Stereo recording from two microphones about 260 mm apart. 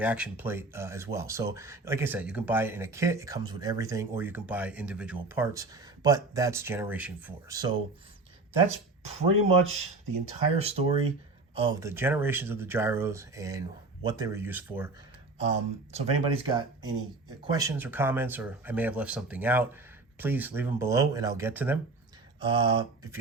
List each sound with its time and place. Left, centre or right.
0.0 s speech: centre
9.0 s speech: right; by 14.8 s centre
15.4 s speech: right; by 21.8 s centre
22.4 s speech: centre